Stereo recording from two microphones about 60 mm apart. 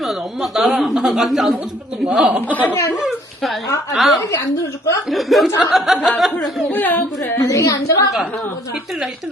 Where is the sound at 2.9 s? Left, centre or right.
Centre.